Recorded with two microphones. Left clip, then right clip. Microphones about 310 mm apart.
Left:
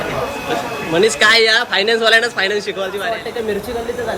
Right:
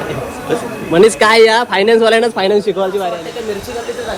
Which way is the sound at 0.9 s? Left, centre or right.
Right.